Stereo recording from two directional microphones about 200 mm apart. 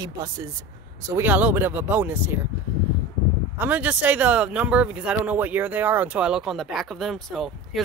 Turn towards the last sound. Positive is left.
turn(degrees=0)  # may be behind; listen again after turning